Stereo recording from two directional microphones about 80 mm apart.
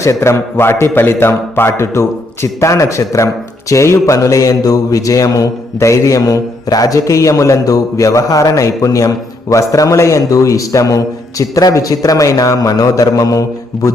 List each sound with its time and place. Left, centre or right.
0.0 s a man's voice: left
3.7 s mantra: left